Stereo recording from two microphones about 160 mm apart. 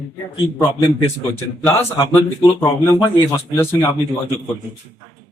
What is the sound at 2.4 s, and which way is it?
Speech, 15° left (ahead or behind).